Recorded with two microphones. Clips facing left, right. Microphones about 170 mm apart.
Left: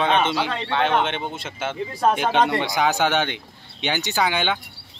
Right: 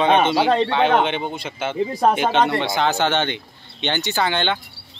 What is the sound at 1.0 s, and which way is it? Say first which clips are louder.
Speech: right 3 dB; centre (ahead or behind).